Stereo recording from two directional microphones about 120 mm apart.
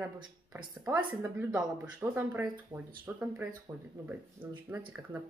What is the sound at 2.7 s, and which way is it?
Speech, 40° right (ahead or behind).